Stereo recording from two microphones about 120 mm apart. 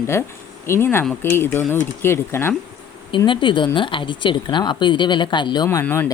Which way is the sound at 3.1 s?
45° left (ahead or behind).